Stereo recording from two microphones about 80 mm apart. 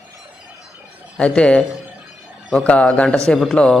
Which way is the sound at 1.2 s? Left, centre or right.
Centre.